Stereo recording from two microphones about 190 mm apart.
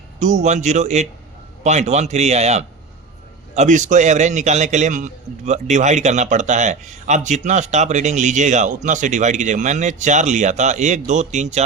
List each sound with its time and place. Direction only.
0.2 s speech: 40° right (ahead or behind)